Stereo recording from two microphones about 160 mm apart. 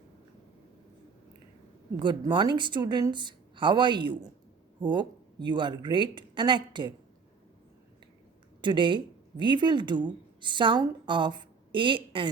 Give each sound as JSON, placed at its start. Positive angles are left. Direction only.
{"t": 2.0, "sound": "speech", "side_deg": -30}
{"t": 8.6, "sound": "a woman's voice", "side_deg": -30}